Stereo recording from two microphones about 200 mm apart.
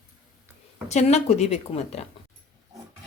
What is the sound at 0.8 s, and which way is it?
A woman's voice, 35° left (ahead or behind).